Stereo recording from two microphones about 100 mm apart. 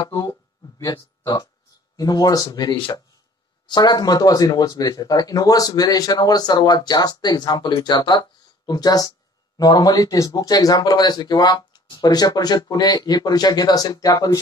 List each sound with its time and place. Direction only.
0.0 s speech: 35° left (ahead or behind)